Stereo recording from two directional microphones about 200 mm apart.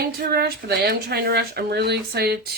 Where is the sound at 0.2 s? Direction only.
50° right (ahead or behind).